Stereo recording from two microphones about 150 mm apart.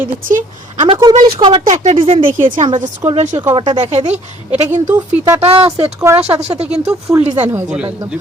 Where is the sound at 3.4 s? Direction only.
30° right (ahead or behind).